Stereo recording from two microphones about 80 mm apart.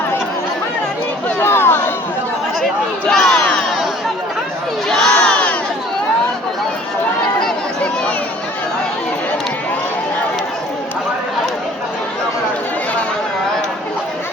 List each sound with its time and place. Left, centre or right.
1.4 s a sound: left
3.1 s crowd: centre
4.9 s crowd: centre